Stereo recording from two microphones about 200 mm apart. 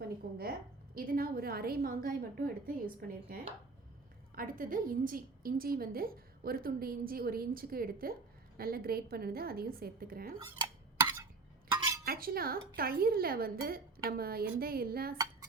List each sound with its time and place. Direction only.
0.2 s a woman's voice: 50° right (ahead or behind)
10.4 s stir: 15° right (ahead or behind)
12.0 s a woman's voice: 50° right (ahead or behind)